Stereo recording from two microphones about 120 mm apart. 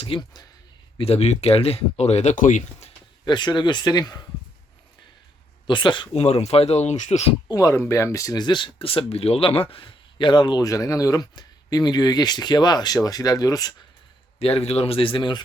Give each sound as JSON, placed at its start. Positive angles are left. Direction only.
{"t": 0.0, "sound": "speech", "side_deg": 45}
{"t": 0.9, "sound": "speech", "side_deg": 55}
{"t": 3.2, "sound": "speech", "side_deg": 40}
{"t": 5.6, "sound": "speech", "side_deg": 40}
{"t": 6.1, "sound": "speech", "side_deg": 60}
{"t": 7.4, "sound": "speech", "side_deg": 30}
{"t": 14.3, "sound": "speech", "side_deg": 55}